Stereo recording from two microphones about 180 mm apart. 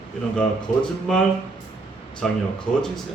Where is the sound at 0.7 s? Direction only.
45° left (ahead or behind).